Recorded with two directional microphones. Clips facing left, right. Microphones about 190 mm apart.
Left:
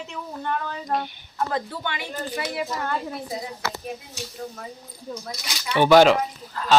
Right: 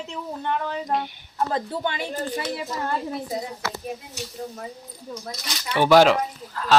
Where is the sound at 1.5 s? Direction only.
35° right (ahead or behind).